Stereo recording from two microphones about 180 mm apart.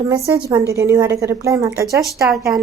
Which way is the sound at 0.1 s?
15° right (ahead or behind).